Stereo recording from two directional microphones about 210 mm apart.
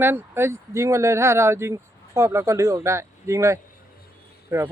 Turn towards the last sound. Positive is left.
turn(degrees=-10)  # may be behind; listen again after turning